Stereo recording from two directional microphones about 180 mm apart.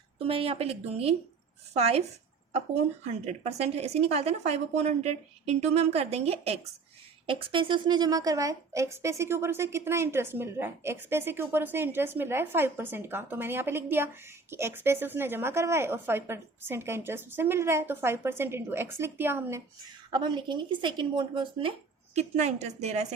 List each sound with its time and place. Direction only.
0.2 s a woman's voice: 30° right (ahead or behind); by 19.6 s 15° right (ahead or behind)
20.1 s speech: 25° right (ahead or behind)
22.1 s a woman's voice: 35° right (ahead or behind)